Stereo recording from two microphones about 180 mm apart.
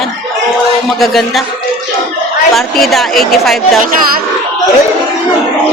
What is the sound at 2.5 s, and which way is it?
A woman's voice, centre (ahead or behind).